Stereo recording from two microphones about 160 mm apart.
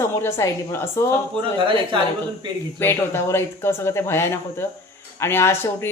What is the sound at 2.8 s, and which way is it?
A woman's voice, 15° left (ahead or behind).